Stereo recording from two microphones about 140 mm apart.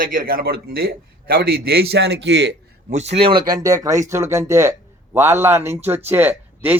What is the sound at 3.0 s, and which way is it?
Speech, 45° right (ahead or behind).